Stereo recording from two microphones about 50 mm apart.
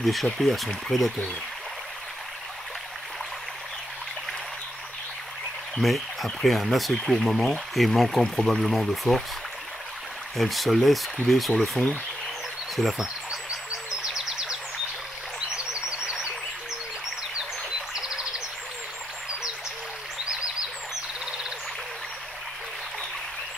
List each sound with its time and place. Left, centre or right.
0.0 s speech: centre
5.8 s speech: centre
10.3 s speech: centre
13.0 s bird: centre
17.9 s bird: centre